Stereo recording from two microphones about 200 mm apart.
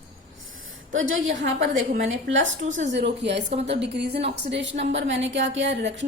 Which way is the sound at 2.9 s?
60° right (ahead or behind).